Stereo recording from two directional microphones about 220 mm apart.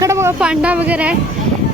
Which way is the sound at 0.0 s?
10° right (ahead or behind).